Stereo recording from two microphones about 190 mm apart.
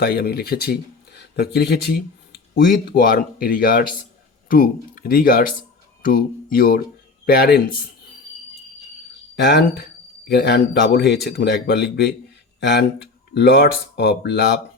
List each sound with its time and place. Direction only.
0.0 s speech: 55° left (ahead or behind)
9.3 s speech: 60° left (ahead or behind)